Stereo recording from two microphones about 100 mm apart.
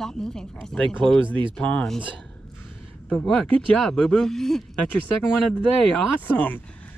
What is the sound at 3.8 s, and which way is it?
Speech, 5° left (ahead or behind).